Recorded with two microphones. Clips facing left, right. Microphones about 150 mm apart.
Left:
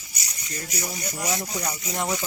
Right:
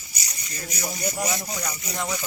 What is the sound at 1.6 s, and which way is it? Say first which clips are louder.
Speech: left 2 dB; 35° left (ahead or behind).